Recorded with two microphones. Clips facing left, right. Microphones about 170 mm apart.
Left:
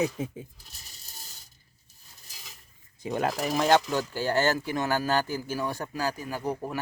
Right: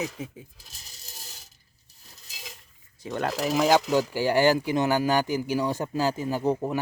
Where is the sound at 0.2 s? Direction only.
30° left (ahead or behind).